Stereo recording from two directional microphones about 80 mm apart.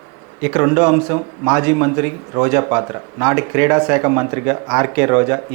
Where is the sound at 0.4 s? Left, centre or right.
Centre.